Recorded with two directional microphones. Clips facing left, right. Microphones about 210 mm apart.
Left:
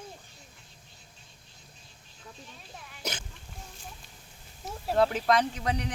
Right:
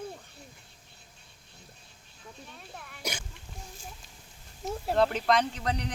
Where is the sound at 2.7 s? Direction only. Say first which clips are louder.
Right 1 dB; 55° right (ahead or behind).